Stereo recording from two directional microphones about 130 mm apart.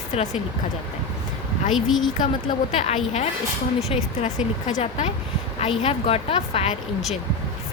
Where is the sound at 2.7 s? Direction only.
55° left (ahead or behind).